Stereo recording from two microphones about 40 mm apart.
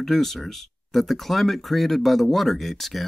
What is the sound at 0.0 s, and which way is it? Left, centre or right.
Speech, centre.